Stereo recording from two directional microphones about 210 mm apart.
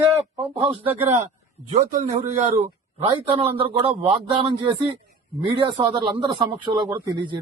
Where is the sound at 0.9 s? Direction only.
30° right (ahead or behind).